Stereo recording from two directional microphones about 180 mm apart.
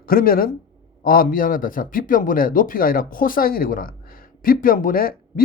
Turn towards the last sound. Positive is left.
turn(degrees=50)  # may be behind; listen again after turning